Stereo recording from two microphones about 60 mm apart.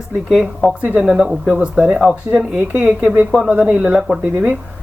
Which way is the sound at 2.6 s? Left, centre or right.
Right.